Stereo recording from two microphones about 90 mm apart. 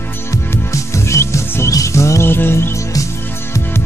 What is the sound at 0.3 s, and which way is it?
Music, 35° left (ahead or behind).